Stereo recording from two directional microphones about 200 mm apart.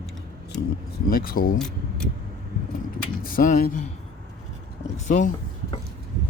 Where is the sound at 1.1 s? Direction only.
45° left (ahead or behind).